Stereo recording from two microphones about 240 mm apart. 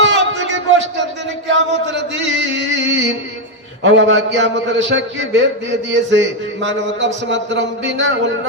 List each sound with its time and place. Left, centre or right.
0.0 s music: right
1.5 s a sound: right
3.8 s a man's voice: right